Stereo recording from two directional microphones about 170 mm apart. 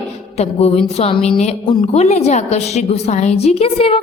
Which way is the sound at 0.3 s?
35° left (ahead or behind).